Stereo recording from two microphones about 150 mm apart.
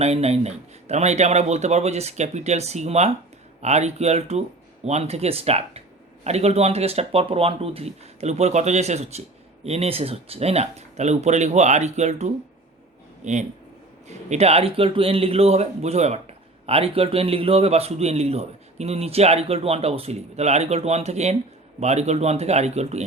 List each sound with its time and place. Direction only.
0.0 s a man's voice: 45° right (ahead or behind)